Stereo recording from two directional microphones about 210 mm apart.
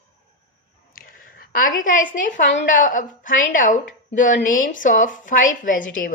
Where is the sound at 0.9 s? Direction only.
45° left (ahead or behind).